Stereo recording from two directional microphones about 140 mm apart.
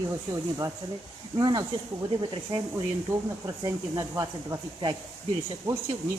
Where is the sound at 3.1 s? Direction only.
20° right (ahead or behind).